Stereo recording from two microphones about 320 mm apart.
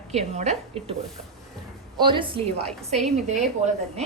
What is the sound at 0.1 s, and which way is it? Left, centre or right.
Speech, right.